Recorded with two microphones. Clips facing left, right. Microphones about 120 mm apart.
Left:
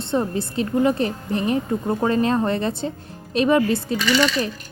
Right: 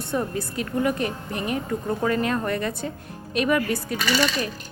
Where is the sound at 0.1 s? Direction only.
25° left (ahead or behind).